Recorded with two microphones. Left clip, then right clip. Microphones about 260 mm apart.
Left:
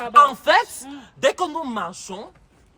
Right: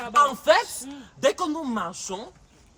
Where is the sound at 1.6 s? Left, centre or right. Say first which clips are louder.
Left 1 dB; left.